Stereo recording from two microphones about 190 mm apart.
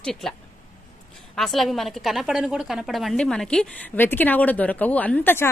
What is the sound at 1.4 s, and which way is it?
A woman's voice, centre (ahead or behind).